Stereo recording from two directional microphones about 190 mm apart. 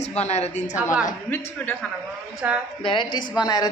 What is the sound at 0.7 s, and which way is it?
Speech, 5° right (ahead or behind).